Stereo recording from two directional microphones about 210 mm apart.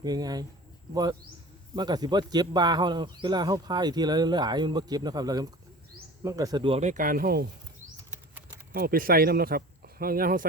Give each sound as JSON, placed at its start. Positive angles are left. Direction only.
{"t": 0.0, "sound": "a man's voice", "side_deg": -20}
{"t": 1.7, "sound": "a man's voice", "side_deg": -20}
{"t": 8.7, "sound": "speech", "side_deg": -45}